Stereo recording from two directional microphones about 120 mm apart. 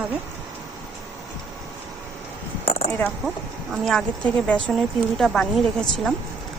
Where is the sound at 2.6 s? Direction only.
60° left (ahead or behind).